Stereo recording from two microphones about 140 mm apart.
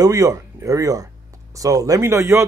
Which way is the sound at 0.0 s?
25° right (ahead or behind).